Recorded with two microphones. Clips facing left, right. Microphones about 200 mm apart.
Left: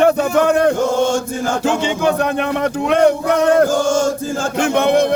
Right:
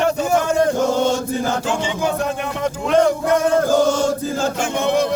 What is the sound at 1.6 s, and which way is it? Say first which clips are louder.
Speech: left 5 dB; 65° left (ahead or behind).